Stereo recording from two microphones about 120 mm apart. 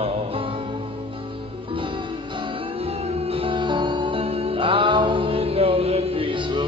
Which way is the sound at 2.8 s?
55° right (ahead or behind).